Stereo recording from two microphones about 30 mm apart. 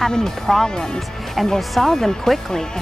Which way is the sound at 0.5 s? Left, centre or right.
Centre.